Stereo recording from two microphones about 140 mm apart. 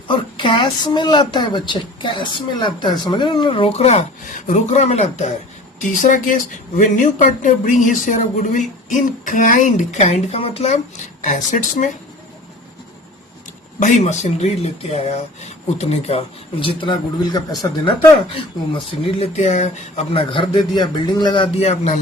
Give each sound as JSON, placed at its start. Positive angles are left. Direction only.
{"t": 0.1, "sound": "a woman's voice", "side_deg": 35}
{"t": 6.0, "sound": "speech", "side_deg": 70}
{"t": 13.7, "sound": "speech", "side_deg": 65}